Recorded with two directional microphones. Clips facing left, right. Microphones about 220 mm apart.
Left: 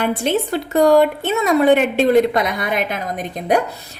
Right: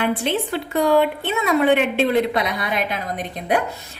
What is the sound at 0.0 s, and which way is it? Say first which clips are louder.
A woman's voice: left 3 dB; 45° left (ahead or behind).